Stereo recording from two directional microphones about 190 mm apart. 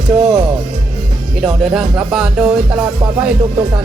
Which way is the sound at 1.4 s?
Centre (ahead or behind).